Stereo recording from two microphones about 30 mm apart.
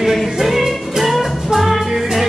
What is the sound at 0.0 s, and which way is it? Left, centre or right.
Music, centre.